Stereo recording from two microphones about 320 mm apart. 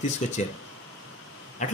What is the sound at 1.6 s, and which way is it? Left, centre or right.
Speech, left.